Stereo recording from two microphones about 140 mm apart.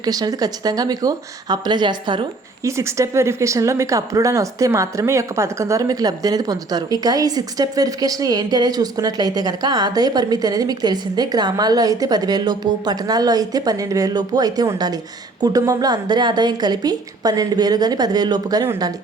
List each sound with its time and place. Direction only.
0.0 s speech: 25° right (ahead or behind)
2.6 s speech: 20° right (ahead or behind)